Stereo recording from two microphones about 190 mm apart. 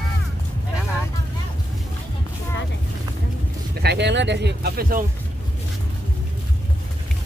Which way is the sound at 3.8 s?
60° right (ahead or behind).